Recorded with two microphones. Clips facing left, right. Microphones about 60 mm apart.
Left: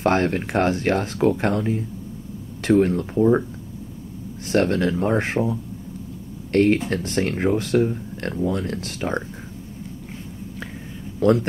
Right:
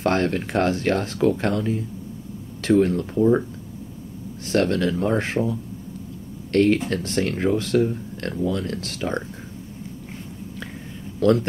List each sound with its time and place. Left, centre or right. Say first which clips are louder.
0.0 s speech: left 2 dB; left
4.5 s speech: left 1 dB; left
8.3 s speech: left 1 dB; left
11.2 s speech: even; left